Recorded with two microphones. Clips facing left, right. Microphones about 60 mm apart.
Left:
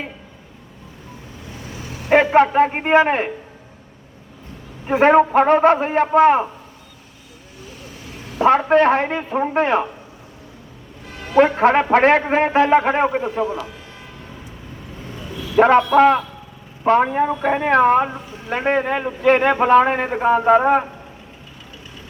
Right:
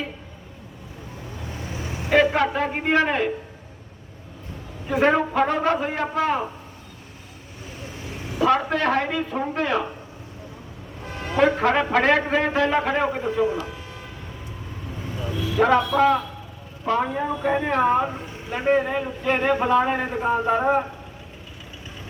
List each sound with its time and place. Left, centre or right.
1.7 s vehicle: right
2.0 s a man's voice: left
4.9 s a man's voice: left
8.4 s a man's voice: left
11.3 s a man's voice: left
15.5 s a man's voice: left